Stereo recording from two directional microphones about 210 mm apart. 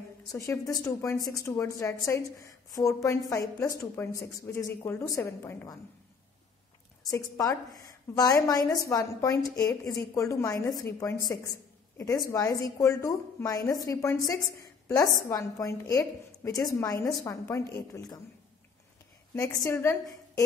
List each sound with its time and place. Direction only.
0.3 s a woman's voice: 15° left (ahead or behind)
7.1 s a woman's voice: 15° left (ahead or behind)
19.3 s a woman's voice: 15° left (ahead or behind)